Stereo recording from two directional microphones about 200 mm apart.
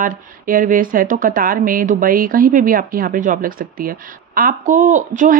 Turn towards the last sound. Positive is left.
turn(degrees=-40)  # may be behind; listen again after turning